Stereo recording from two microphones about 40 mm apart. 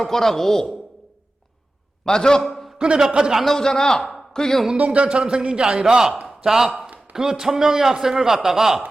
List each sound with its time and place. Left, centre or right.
0.0 s speech: centre
2.0 s speech: centre
2.7 s a man's voice: right
3.4 s speech: centre
4.8 s speech: right
5.0 s a man's voice: right
6.2 s a sound: centre
7.1 s a man's voice: centre